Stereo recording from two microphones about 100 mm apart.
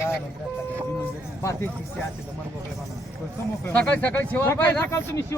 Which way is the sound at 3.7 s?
15° left (ahead or behind).